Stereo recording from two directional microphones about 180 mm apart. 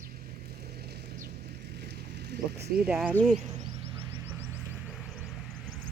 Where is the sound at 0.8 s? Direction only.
65° right (ahead or behind).